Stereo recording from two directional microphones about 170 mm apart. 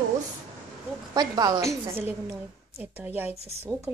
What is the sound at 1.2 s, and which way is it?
Speech, 25° right (ahead or behind).